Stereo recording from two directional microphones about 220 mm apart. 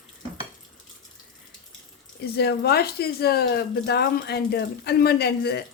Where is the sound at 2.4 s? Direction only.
45° left (ahead or behind).